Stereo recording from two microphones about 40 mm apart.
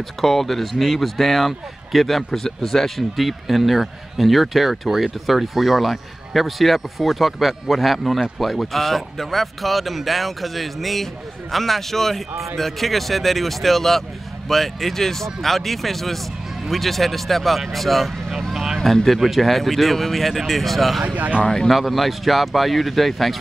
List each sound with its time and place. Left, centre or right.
0.2 s a man's voice: centre
21.1 s speech: right
21.6 s a man's voice: centre